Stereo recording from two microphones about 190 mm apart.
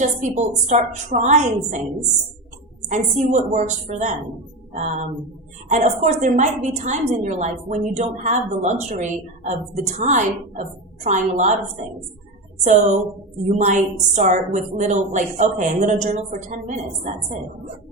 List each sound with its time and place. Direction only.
0.0 s a woman's voice: 40° right (ahead or behind)
2.9 s a woman's voice: 40° right (ahead or behind)
12.6 s a woman's voice: 40° right (ahead or behind)